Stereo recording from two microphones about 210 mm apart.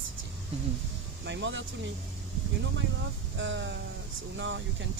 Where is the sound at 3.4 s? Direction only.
60° right (ahead or behind).